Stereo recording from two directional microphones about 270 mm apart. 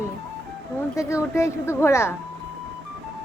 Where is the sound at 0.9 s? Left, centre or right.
Centre.